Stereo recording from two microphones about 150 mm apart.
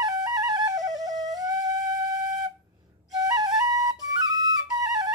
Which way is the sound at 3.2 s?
25° right (ahead or behind).